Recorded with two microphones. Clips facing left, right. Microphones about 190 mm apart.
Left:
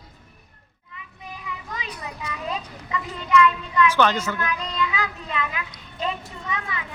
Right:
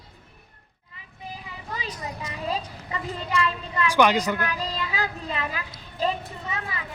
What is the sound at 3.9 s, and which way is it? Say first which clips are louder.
Speech: right 5 dB; 15° right (ahead or behind).